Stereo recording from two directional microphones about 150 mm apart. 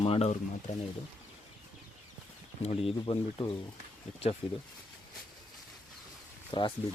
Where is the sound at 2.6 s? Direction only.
45° left (ahead or behind).